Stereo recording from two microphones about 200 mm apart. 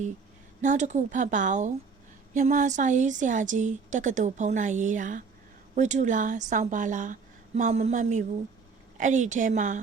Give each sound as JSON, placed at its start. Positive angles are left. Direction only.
{"t": 0.6, "sound": "a woman's voice", "side_deg": -35}